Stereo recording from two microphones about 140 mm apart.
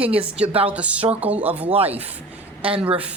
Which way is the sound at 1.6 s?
45° right (ahead or behind).